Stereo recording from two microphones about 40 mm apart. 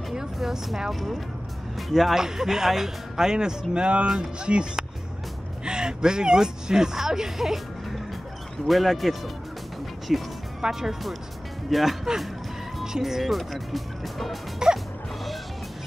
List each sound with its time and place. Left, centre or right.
0.4 s speech: centre
1.8 s speech: centre
13.2 s speech: centre
14.6 s speech: centre